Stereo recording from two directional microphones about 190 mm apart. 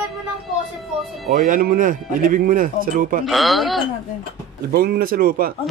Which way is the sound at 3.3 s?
Centre (ahead or behind).